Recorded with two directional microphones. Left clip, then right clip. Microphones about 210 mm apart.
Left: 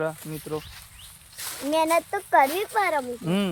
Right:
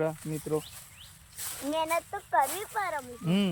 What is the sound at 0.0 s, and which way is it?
Speech, 10° left (ahead or behind).